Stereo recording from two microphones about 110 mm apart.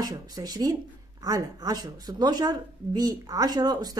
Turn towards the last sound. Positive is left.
turn(degrees=-35)  # may be behind; listen again after turning